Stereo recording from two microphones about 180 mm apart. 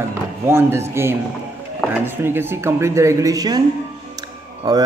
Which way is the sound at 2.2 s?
15° right (ahead or behind).